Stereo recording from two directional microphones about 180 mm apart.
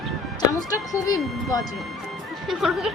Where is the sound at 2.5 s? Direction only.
Centre (ahead or behind).